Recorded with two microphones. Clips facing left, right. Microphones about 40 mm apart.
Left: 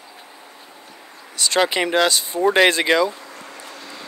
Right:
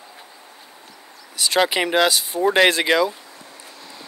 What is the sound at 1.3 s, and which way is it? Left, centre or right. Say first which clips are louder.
Speech: even; centre.